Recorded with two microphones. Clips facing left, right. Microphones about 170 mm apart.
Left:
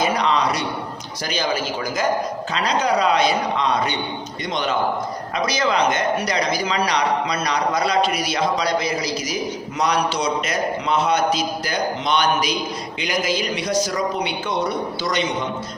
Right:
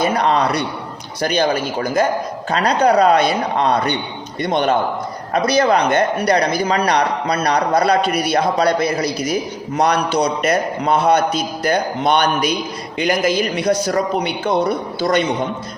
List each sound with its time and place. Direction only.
0.0 s speech: 55° right (ahead or behind)